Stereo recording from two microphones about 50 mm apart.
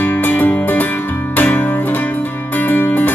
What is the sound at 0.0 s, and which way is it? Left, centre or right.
Music, left.